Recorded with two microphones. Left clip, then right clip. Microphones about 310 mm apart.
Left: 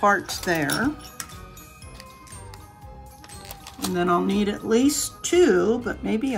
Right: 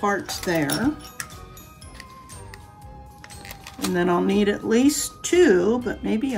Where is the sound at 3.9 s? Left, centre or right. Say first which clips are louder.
Right 1 dB; left.